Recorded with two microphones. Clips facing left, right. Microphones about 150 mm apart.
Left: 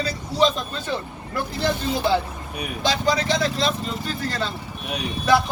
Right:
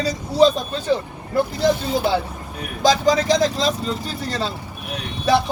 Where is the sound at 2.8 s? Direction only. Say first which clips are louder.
Right 6 dB; 40° right (ahead or behind).